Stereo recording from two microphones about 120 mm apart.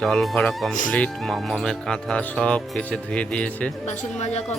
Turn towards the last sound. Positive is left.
turn(degrees=70)  # may be behind; listen again after turning